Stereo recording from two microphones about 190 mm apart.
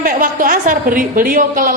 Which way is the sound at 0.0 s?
45° right (ahead or behind).